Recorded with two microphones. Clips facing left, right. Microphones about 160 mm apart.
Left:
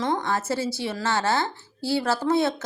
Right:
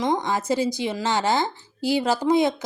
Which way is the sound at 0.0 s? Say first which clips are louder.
Right 2 dB; 15° right (ahead or behind).